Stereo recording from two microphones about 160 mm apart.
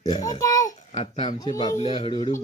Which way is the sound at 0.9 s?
35° left (ahead or behind).